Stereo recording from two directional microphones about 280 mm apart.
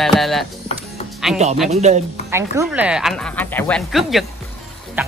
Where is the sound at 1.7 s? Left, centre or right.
Right.